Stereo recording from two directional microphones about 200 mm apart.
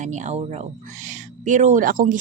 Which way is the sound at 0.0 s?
35° right (ahead or behind).